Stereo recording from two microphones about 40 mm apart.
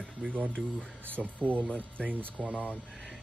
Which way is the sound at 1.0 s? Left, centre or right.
Right.